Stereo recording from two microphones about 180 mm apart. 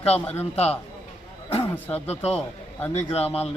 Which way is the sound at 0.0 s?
35° left (ahead or behind).